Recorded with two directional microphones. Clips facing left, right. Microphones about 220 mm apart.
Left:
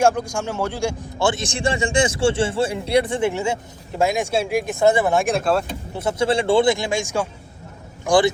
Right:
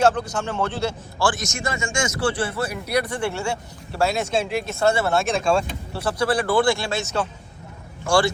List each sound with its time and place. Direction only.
0.0 s a man's voice: 10° left (ahead or behind)
1.3 s a man's voice: 30° left (ahead or behind)
5.3 s speech: 5° left (ahead or behind)
5.9 s a man's voice: 20° left (ahead or behind)